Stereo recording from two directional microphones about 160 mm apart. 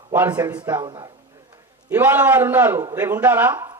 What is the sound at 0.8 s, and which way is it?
Speech, 30° right (ahead or behind).